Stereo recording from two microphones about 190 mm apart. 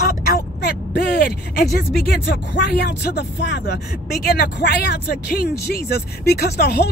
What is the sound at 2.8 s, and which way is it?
Speech, 60° left (ahead or behind).